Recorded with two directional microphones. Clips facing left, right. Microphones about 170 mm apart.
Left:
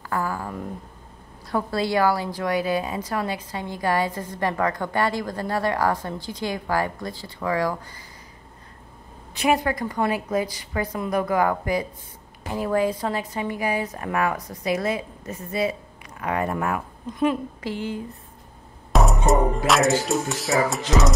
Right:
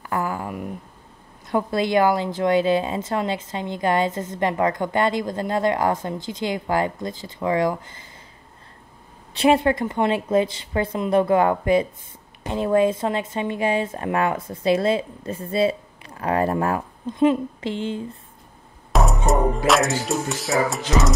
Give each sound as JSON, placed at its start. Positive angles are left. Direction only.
{"t": 0.1, "sound": "a sound", "side_deg": -20}
{"t": 1.5, "sound": "a woman's voice", "side_deg": -20}
{"t": 9.3, "sound": "a woman's voice", "side_deg": -30}
{"t": 18.9, "sound": "speech", "side_deg": 0}